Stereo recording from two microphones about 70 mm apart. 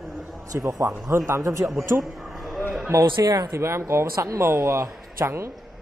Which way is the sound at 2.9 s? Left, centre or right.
Right.